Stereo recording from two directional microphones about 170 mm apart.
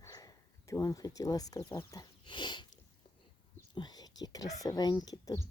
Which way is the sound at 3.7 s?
25° left (ahead or behind).